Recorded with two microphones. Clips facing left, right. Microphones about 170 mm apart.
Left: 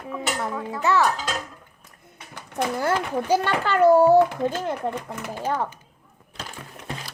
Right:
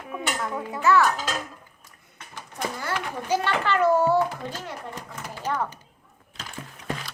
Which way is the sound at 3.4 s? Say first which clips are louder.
Left 4 dB; 35° left (ahead or behind).